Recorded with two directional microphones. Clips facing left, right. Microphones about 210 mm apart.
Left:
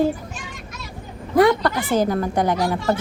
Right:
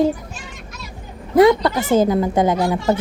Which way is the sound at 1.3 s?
20° right (ahead or behind).